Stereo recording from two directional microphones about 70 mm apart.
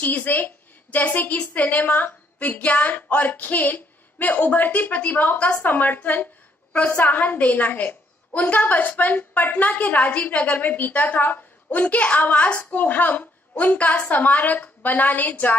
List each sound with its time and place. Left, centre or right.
0.0 s a woman's voice: left